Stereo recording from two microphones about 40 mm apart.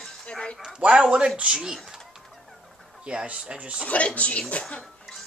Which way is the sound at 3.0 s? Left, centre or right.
Right.